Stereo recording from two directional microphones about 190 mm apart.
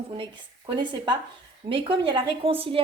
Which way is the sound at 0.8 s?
25° right (ahead or behind).